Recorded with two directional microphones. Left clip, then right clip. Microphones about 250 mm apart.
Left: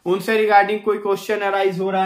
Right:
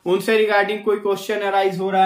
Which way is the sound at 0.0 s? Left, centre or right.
Centre.